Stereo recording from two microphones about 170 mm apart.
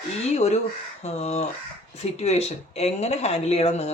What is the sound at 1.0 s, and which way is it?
Speech, 40° left (ahead or behind).